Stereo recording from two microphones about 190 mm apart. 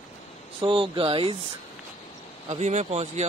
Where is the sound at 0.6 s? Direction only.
25° right (ahead or behind).